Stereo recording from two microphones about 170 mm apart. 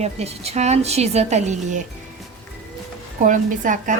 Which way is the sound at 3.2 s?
50° right (ahead or behind).